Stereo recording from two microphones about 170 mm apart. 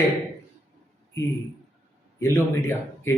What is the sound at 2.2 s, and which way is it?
Speech, 15° left (ahead or behind).